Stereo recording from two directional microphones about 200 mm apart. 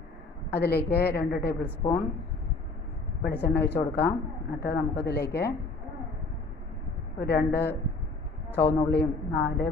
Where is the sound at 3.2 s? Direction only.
50° left (ahead or behind).